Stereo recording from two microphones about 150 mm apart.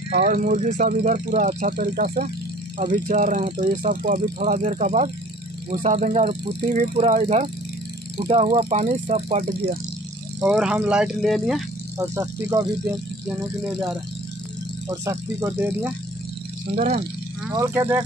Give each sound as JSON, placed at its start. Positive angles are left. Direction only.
{"t": 0.1, "sound": "speech", "side_deg": -65}
{"t": 1.7, "sound": "speech", "side_deg": -85}
{"t": 2.8, "sound": "speech", "side_deg": -65}
{"t": 10.4, "sound": "speech", "side_deg": -5}
{"t": 12.0, "sound": "speech", "side_deg": -25}
{"t": 14.9, "sound": "speech", "side_deg": -20}
{"t": 16.7, "sound": "speech", "side_deg": -50}
{"t": 17.5, "sound": "speech", "side_deg": -20}